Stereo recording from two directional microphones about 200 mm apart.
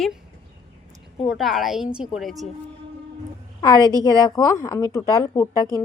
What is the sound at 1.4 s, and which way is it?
A woman's voice, centre (ahead or behind).